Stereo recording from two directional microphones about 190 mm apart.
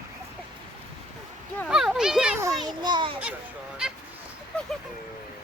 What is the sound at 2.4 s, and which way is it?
Speech, 20° right (ahead or behind).